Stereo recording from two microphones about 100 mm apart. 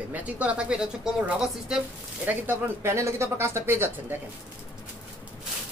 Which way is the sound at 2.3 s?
25° right (ahead or behind).